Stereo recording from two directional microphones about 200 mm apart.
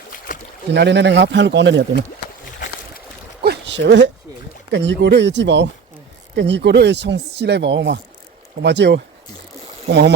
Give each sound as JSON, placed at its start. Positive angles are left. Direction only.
{"t": 0.3, "sound": "boat", "side_deg": 40}
{"t": 0.7, "sound": "speech", "side_deg": -60}
{"t": 3.4, "sound": "a sound", "side_deg": -60}
{"t": 4.7, "sound": "speech", "side_deg": -60}